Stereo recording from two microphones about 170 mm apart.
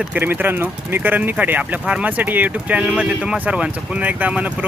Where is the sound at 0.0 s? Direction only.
10° right (ahead or behind).